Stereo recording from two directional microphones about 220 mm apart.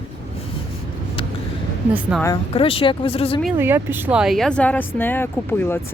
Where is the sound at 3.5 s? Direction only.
10° right (ahead or behind); by 5.8 s 10° left (ahead or behind).